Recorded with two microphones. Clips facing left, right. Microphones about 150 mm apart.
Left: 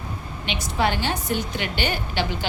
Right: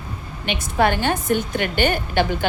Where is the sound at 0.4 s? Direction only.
50° right (ahead or behind).